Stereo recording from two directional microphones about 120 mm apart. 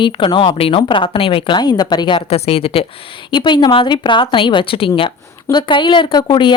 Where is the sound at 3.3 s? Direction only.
40° left (ahead or behind).